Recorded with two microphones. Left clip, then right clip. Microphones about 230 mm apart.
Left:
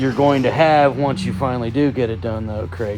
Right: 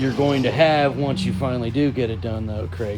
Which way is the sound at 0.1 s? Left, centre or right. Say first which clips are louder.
Left 6 dB; centre.